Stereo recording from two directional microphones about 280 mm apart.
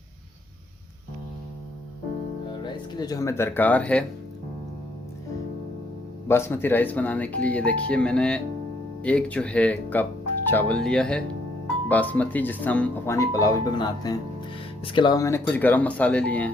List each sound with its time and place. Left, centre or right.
2.6 s speech: centre
6.2 s speech: centre